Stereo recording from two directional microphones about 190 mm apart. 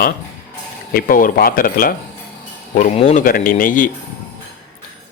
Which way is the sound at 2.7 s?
40° left (ahead or behind).